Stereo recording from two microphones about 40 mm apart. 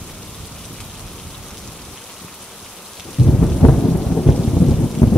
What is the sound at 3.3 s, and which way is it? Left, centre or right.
Thunder, centre.